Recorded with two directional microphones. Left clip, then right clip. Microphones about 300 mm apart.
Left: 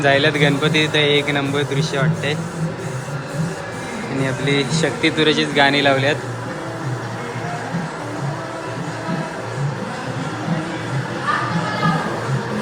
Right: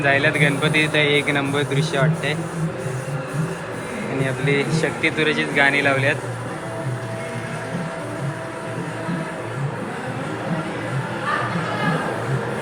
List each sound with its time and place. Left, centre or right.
0.0 s speech: centre
4.2 s speech: centre